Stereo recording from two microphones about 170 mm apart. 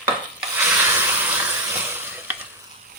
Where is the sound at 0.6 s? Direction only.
10° right (ahead or behind).